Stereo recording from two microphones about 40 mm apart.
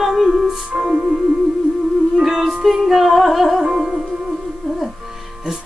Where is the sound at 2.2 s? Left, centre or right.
Centre.